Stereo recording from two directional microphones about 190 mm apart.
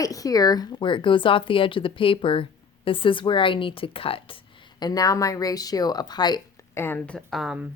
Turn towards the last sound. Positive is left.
turn(degrees=0)  # may be behind; listen again after turning